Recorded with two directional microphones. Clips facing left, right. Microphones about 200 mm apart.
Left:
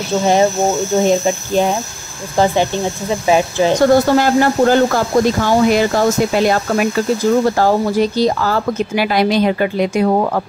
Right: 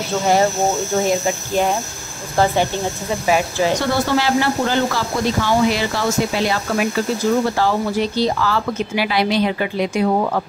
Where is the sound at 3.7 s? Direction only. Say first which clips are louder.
Left 8 dB; 45° left (ahead or behind).